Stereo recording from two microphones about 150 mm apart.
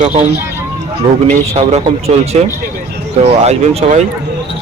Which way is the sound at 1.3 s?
45° right (ahead or behind).